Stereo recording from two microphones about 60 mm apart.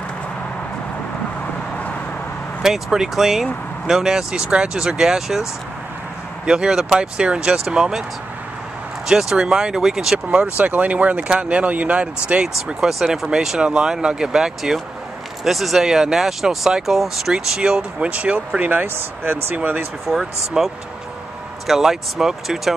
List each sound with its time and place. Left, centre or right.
2.6 s speech: centre
6.4 s speech: centre
9.0 s speech: centre
12.8 s speech: centre
18.9 s speech: right
19.5 s speech: right
20.1 s speech: centre